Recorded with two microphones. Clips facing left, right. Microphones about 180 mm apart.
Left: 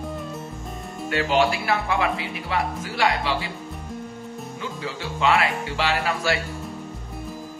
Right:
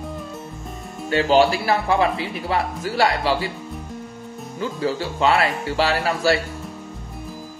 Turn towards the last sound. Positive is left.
turn(degrees=-35)  # may be behind; listen again after turning